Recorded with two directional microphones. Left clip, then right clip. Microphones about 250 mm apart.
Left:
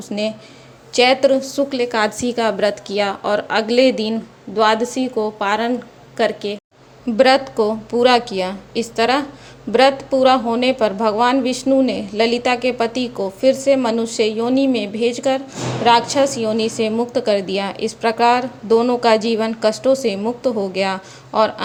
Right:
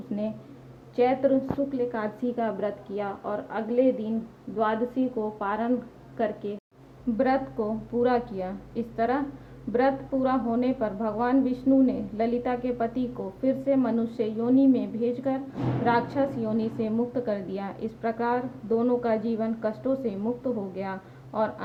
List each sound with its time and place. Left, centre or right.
0.9 s a woman's voice: left